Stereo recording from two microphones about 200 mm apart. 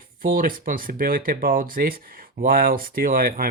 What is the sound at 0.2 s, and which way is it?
Speech, 45° right (ahead or behind).